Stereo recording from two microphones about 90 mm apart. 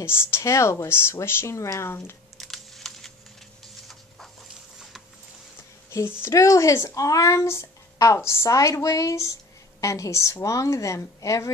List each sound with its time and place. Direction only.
0.0 s speech: 30° left (ahead or behind)
2.3 s typing: 5° left (ahead or behind)
5.9 s a sound: 30° left (ahead or behind)
6.2 s speech: 35° left (ahead or behind)